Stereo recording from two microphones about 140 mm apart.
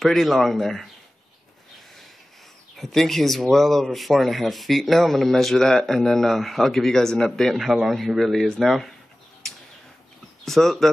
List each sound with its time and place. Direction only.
0.0 s speech: centre (ahead or behind)
2.7 s speech: centre (ahead or behind)
10.4 s speech: centre (ahead or behind)